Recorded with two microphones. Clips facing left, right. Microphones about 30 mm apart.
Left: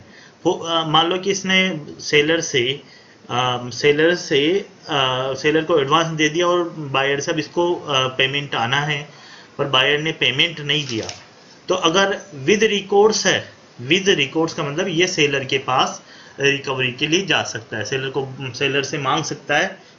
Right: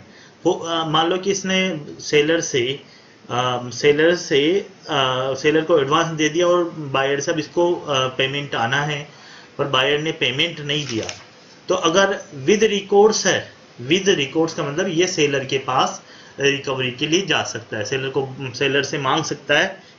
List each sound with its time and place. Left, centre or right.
0.4 s speech: centre
3.3 s speech: centre